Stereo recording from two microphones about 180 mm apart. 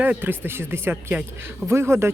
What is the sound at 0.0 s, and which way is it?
Speech, 10° right (ahead or behind).